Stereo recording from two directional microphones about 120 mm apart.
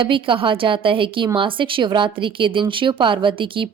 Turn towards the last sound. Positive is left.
turn(degrees=-45)  # may be behind; listen again after turning